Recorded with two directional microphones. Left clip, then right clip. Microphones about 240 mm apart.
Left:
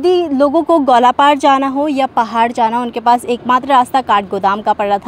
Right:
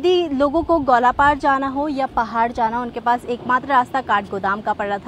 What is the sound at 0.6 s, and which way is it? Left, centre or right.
Speech, left.